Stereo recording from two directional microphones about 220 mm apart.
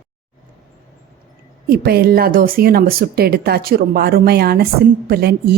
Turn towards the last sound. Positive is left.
turn(degrees=-45)  # may be behind; listen again after turning